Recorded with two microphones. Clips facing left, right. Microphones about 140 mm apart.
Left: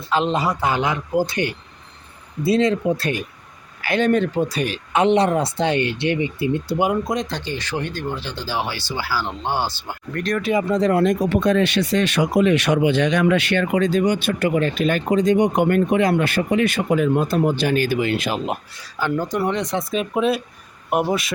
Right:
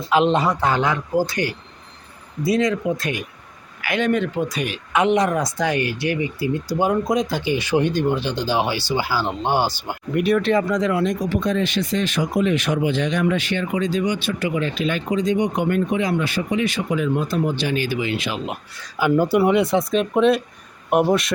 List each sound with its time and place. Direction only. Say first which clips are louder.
0.1 s speech: right 3 dB; centre (ahead or behind); by 6.8 s 25° left (ahead or behind)
6.8 s speech: right 4 dB; centre (ahead or behind)
10.4 s speech: right 1 dB; 15° left (ahead or behind)
10.7 s speech: left 2 dB; 35° left (ahead or behind)
10.9 s speech: left 3 dB; 55° left (ahead or behind)
18.9 s speech: right 5 dB; 10° right (ahead or behind)